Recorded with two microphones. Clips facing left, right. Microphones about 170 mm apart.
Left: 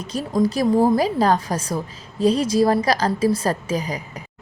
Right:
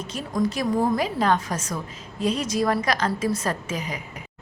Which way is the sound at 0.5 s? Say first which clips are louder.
Left 7 dB; 35° left (ahead or behind).